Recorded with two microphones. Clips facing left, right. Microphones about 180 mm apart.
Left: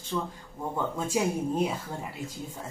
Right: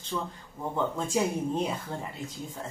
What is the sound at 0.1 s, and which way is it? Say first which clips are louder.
Speech: left 2 dB; centre (ahead or behind).